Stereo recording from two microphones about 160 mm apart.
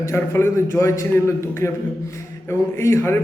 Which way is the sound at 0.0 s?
15° left (ahead or behind).